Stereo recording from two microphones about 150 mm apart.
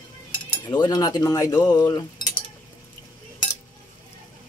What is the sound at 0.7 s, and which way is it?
Speech, 30° left (ahead or behind).